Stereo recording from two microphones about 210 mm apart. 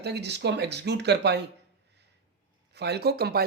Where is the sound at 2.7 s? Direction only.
50° right (ahead or behind).